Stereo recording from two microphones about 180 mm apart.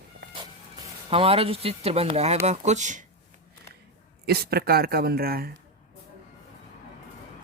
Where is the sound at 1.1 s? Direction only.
30° right (ahead or behind).